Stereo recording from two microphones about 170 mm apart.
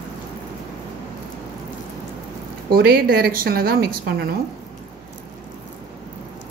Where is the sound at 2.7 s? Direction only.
65° right (ahead or behind).